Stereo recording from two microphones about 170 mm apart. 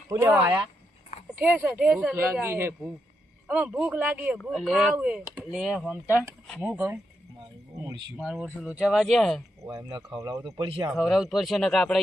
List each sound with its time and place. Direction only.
0.1 s speech: 15° right (ahead or behind)
4.4 s speech: centre (ahead or behind)
8.2 s speech: 5° right (ahead or behind)
9.6 s speech: 25° right (ahead or behind)
10.9 s speech: centre (ahead or behind)